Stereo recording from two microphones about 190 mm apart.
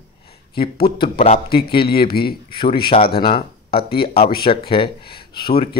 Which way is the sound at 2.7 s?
25° left (ahead or behind).